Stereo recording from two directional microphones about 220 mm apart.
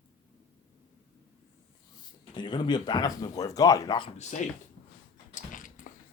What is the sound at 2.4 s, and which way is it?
Speech, 20° left (ahead or behind).